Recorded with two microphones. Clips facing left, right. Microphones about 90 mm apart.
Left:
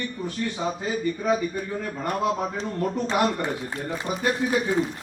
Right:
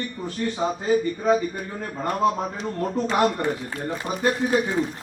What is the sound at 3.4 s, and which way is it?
Speech, 25° left (ahead or behind).